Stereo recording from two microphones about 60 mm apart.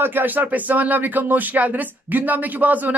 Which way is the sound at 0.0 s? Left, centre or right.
Right.